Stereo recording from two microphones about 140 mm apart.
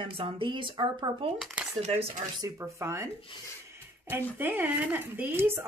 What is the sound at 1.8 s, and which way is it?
Speech, 50° right (ahead or behind).